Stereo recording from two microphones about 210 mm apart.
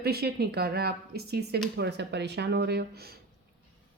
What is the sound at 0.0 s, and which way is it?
Speech, 50° right (ahead or behind).